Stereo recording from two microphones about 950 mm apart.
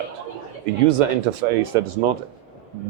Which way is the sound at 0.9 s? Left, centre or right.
Right.